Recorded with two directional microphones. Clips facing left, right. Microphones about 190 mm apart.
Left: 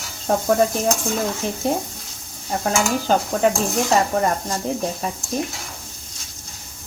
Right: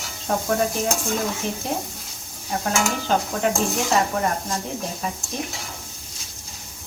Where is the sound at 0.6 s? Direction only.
Centre (ahead or behind).